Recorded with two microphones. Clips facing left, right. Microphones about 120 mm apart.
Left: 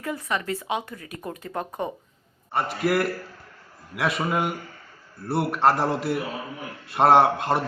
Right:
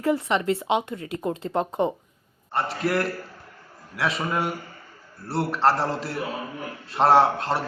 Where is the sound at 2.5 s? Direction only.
10° left (ahead or behind).